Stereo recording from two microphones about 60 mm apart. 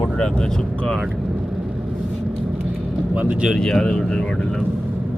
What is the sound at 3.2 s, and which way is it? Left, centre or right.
Speech, centre.